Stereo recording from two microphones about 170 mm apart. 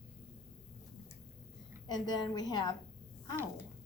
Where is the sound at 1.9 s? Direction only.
25° left (ahead or behind).